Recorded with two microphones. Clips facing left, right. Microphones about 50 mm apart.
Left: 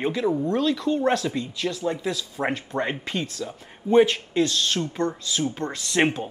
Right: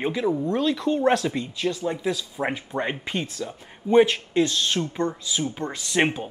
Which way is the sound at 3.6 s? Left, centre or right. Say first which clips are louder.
Even; centre.